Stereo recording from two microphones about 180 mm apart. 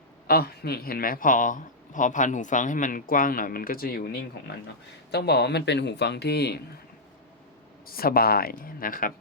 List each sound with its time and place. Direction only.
0.3 s speech: 60° left (ahead or behind)
7.9 s speech: 55° left (ahead or behind)